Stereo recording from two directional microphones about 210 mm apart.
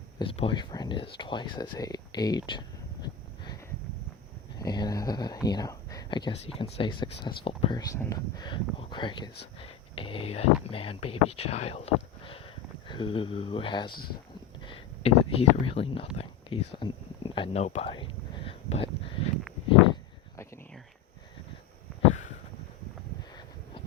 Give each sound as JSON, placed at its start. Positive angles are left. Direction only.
{"t": 0.2, "sound": "speech", "side_deg": 25}
{"t": 4.6, "sound": "speech", "side_deg": 20}
{"t": 12.9, "sound": "speech", "side_deg": 25}
{"t": 14.6, "sound": "a sound", "side_deg": 25}